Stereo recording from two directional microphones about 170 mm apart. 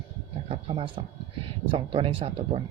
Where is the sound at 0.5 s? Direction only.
30° right (ahead or behind).